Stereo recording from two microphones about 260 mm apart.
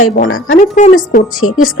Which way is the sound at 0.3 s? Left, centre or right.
Left.